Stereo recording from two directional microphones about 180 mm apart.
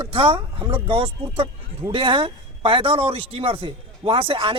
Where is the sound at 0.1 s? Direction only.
30° right (ahead or behind).